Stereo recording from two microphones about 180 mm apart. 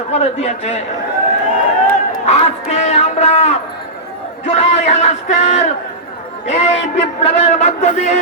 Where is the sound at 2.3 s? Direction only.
35° left (ahead or behind).